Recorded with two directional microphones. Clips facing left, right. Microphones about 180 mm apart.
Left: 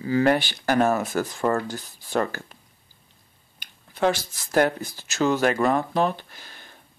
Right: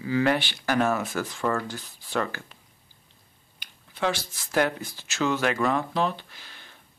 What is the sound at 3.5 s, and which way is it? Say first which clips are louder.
Speech: left 5 dB; 45° left (ahead or behind).